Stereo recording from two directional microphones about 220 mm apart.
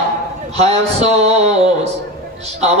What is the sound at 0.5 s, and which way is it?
A man's voice, 30° right (ahead or behind).